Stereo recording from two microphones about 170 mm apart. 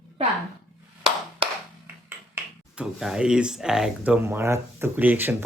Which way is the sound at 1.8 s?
10° right (ahead or behind).